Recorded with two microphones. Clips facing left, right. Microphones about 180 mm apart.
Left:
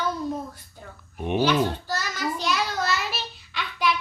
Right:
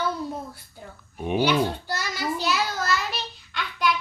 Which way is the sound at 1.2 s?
5° right (ahead or behind).